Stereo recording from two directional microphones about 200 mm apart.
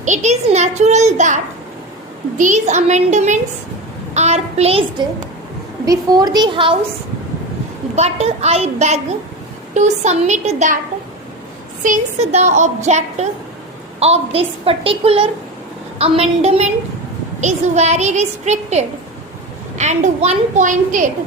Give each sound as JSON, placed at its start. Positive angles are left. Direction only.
{"t": 0.0, "sound": "a woman's voice", "side_deg": -35}
{"t": 2.4, "sound": "a woman's voice", "side_deg": -35}
{"t": 7.9, "sound": "a woman's voice", "side_deg": -35}
{"t": 11.8, "sound": "a woman's voice", "side_deg": -35}